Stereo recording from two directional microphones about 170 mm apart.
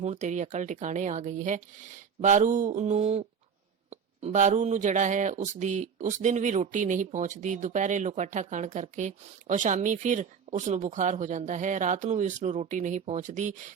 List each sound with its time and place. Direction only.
0.0 s speech: 45° right (ahead or behind)